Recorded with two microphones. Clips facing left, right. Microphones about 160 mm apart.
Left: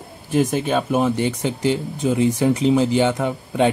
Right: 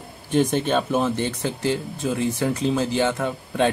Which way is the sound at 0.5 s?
10° left (ahead or behind).